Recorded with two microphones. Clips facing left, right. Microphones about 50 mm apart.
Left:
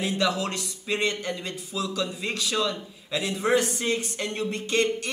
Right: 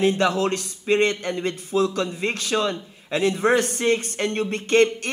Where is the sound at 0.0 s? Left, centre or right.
Right.